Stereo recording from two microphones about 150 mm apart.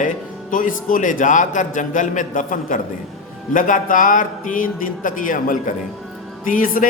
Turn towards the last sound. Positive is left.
turn(degrees=65)  # may be behind; listen again after turning